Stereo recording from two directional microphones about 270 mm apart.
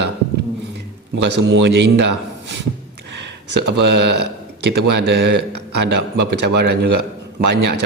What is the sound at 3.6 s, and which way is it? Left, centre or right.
A man's voice, right.